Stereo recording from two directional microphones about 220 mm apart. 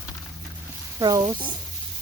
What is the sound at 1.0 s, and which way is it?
Speech, 15° right (ahead or behind).